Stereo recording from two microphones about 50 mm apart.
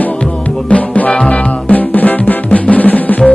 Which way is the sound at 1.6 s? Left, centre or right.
Left.